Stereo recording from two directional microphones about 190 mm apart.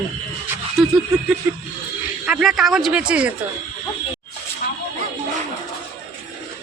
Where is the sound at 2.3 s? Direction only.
5° right (ahead or behind).